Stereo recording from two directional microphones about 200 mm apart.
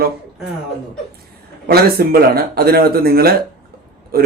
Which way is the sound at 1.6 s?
50° right (ahead or behind).